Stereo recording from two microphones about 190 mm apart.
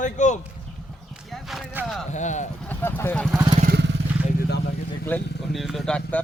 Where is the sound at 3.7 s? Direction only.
60° right (ahead or behind).